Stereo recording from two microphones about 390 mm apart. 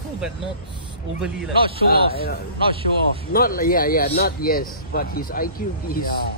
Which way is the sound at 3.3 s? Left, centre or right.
Left.